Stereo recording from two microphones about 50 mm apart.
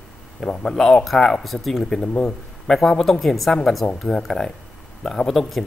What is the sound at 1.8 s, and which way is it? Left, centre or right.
A man's voice, centre.